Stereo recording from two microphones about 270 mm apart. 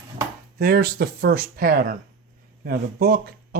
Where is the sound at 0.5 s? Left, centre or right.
Right.